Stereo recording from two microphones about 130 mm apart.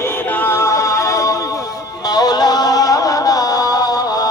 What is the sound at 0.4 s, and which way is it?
Music, 20° left (ahead or behind).